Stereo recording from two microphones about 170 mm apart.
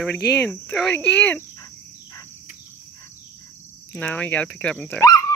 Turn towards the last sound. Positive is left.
turn(degrees=20)  # may be behind; listen again after turning